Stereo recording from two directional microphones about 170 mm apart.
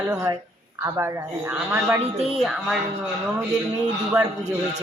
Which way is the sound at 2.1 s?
35° right (ahead or behind).